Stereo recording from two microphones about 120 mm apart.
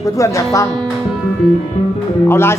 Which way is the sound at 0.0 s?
25° left (ahead or behind).